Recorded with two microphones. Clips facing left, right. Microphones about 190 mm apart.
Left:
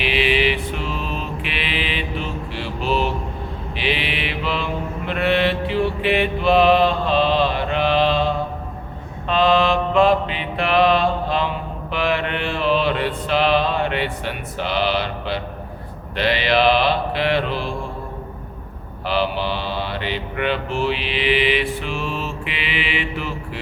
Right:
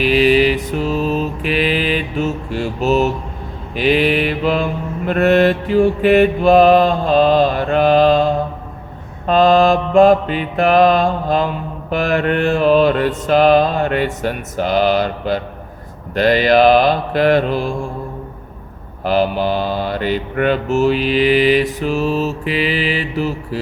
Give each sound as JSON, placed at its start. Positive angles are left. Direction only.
{"t": 0.0, "sound": "mantra", "side_deg": -40}
{"t": 19.0, "sound": "mantra", "side_deg": -45}